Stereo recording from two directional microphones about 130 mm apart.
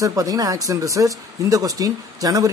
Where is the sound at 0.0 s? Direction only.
25° right (ahead or behind).